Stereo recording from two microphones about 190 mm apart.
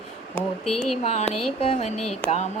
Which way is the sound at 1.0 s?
35° left (ahead or behind).